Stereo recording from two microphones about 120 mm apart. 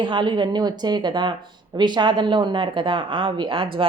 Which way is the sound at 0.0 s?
40° right (ahead or behind).